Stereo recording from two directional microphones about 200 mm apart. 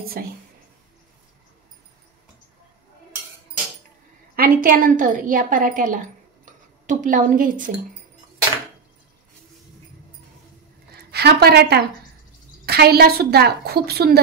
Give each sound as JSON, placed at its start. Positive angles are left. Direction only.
{"t": 4.4, "sound": "a woman's voice", "side_deg": -45}
{"t": 11.0, "sound": "a woman's voice", "side_deg": -55}